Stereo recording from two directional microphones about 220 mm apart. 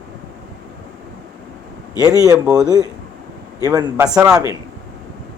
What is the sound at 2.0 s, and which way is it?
Speech, 15° right (ahead or behind).